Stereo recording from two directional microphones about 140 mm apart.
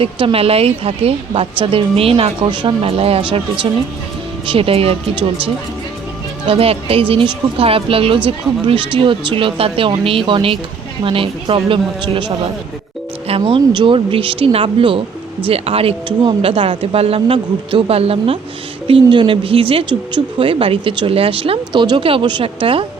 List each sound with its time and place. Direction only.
0.0 s speech: 40° right (ahead or behind)
6.4 s speech: 45° right (ahead or behind)
13.4 s speech: 35° right (ahead or behind)